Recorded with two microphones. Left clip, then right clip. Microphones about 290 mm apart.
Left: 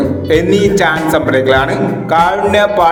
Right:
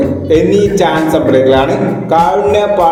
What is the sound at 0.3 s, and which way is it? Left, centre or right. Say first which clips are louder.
Music: right 1 dB; left.